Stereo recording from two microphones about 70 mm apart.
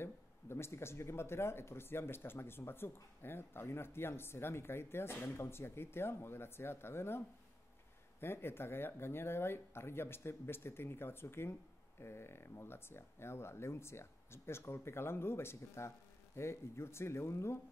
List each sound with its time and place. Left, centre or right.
0.0 s speech: left